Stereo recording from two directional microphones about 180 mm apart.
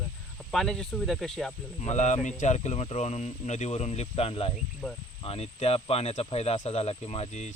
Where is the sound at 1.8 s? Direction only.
40° left (ahead or behind).